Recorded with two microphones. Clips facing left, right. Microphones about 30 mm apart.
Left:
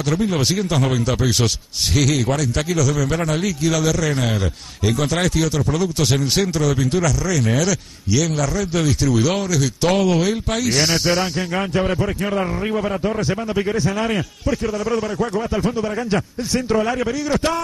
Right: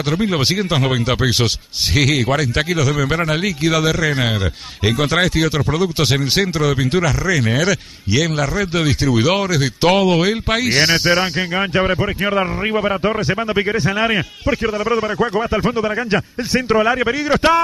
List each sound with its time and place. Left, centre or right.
0.1 s a man's voice: right